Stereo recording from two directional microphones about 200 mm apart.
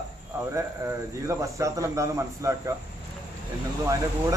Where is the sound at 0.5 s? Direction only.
15° right (ahead or behind).